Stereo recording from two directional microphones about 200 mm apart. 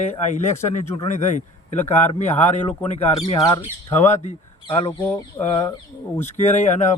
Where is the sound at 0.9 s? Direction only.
35° left (ahead or behind).